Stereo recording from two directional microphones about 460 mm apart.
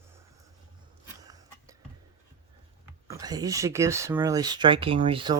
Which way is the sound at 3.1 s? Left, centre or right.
Centre.